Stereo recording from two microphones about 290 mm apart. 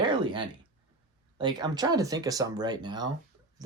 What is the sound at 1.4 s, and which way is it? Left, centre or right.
Speech, centre.